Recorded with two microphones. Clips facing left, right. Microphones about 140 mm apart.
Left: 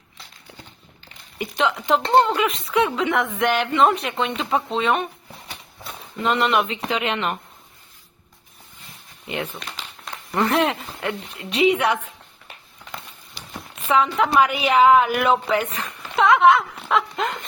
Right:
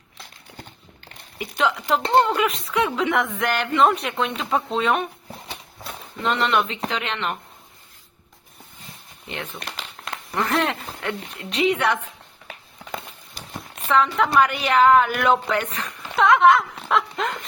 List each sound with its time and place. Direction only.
1.4 s a woman's voice: centre (ahead or behind)
6.2 s a woman's voice: 5° left (ahead or behind)
9.6 s crumpling: 65° right (ahead or behind)
10.3 s a woman's voice: 5° left (ahead or behind)
13.8 s a woman's voice: 5° left (ahead or behind)